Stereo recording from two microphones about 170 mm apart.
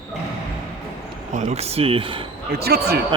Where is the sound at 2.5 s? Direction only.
70° right (ahead or behind).